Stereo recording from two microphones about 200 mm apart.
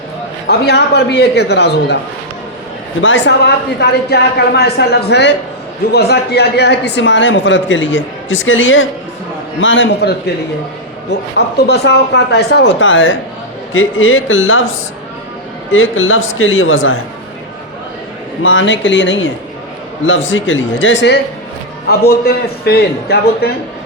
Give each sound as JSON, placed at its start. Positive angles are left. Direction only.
{"t": 0.4, "sound": "speech", "side_deg": 55}
{"t": 3.0, "sound": "speech", "side_deg": 65}
{"t": 11.3, "sound": "speech", "side_deg": 55}
{"t": 13.7, "sound": "speech", "side_deg": 85}
{"t": 15.7, "sound": "a man's voice", "side_deg": 85}
{"t": 18.4, "sound": "speech", "side_deg": 70}
{"t": 21.8, "sound": "a man's voice", "side_deg": 50}